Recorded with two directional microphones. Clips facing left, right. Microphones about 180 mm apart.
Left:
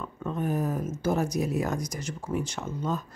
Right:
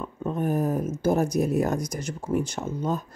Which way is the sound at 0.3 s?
45° right (ahead or behind).